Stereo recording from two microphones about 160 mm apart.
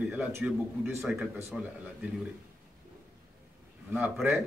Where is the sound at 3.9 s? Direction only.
10° right (ahead or behind).